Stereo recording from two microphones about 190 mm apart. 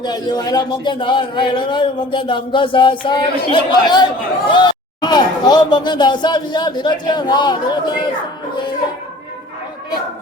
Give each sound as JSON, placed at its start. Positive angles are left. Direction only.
{"t": 0.0, "sound": "a man's voice", "side_deg": 20}